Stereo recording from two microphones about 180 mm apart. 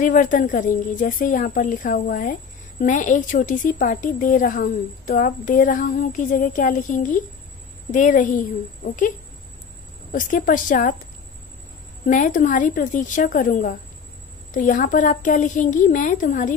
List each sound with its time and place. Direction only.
0.0 s a woman's voice: 45° left (ahead or behind)
10.1 s a woman's voice: 45° left (ahead or behind)
12.1 s a woman's voice: 45° left (ahead or behind)